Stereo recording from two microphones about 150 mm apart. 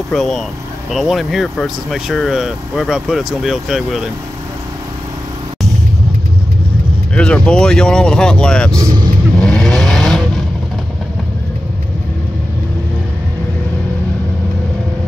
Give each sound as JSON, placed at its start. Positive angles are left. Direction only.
{"t": 0.1, "sound": "speech", "side_deg": 0}
{"t": 7.2, "sound": "speech", "side_deg": 5}
{"t": 8.7, "sound": "speech", "side_deg": -25}
{"t": 9.4, "sound": "vehicle", "side_deg": 0}